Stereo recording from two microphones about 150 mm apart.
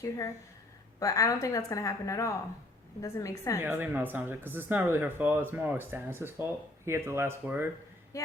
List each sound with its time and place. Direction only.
0.9 s a woman's voice: 25° left (ahead or behind)
3.6 s speech: 15° right (ahead or behind)
8.1 s speech: 20° left (ahead or behind)